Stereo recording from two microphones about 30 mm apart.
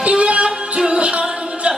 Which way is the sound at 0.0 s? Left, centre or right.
Right.